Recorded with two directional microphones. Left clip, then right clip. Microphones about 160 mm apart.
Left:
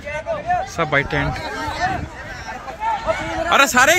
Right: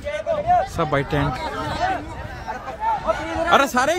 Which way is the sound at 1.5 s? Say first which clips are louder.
Left 2 dB; 70° left (ahead or behind).